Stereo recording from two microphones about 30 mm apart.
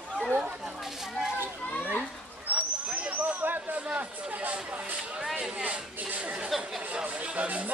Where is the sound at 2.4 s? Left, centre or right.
Right.